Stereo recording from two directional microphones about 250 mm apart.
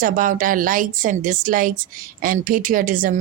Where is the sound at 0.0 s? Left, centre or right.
Right.